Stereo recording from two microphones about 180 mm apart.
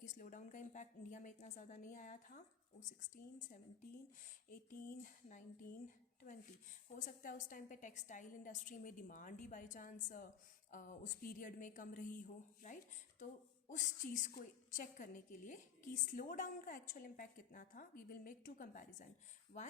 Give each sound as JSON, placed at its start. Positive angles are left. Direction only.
{"t": 0.0, "sound": "a woman's voice", "side_deg": 45}
{"t": 4.9, "sound": "a woman's voice", "side_deg": 50}